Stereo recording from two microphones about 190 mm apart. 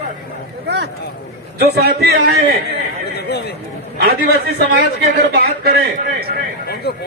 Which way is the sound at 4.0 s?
55° right (ahead or behind).